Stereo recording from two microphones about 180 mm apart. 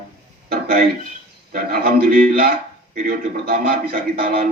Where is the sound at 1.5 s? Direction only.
55° right (ahead or behind).